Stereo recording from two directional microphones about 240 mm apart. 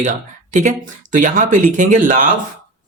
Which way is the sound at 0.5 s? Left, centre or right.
Right.